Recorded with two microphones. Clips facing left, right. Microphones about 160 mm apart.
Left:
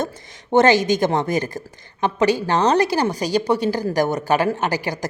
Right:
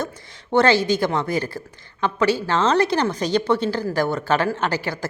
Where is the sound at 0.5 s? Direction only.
15° left (ahead or behind).